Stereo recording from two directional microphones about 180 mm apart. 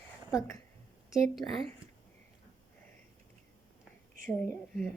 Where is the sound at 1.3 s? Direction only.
Centre (ahead or behind).